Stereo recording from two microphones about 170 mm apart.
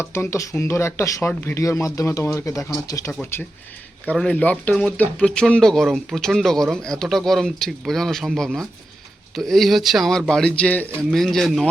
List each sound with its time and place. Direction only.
0.0 s speech: 15° left (ahead or behind)